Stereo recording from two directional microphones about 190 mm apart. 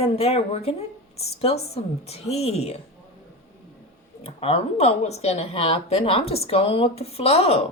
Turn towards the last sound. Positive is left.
turn(degrees=30)  # may be behind; listen again after turning